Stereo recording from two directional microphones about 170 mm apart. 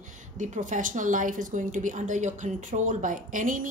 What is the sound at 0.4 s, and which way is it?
A woman's voice, 45° right (ahead or behind).